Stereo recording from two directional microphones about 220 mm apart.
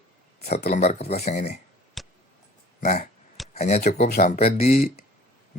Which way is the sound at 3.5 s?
30° left (ahead or behind).